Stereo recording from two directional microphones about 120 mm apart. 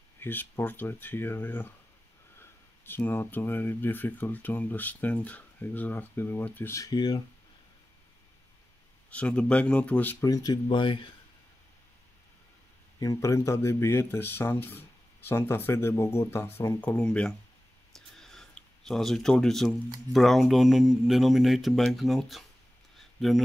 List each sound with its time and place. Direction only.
0.2 s speech: 15° left (ahead or behind)
6.9 s speech: 35° left (ahead or behind)
9.1 s speech: 10° left (ahead or behind)
10.2 s speech: 30° left (ahead or behind)
13.0 s speech: 25° left (ahead or behind); by 17.3 s 10° left (ahead or behind)
17.9 s a sound: 5° left (ahead or behind)
20.1 s speech: centre (ahead or behind)
22.9 s a sound: centre (ahead or behind)